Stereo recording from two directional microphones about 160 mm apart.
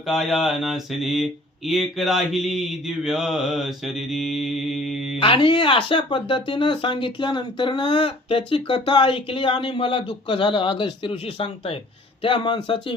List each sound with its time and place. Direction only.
0.1 s speech: centre (ahead or behind)
5.2 s speech: 35° left (ahead or behind)